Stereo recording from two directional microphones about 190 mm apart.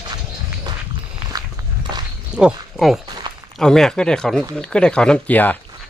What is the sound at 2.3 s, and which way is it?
Speech, 5° right (ahead or behind).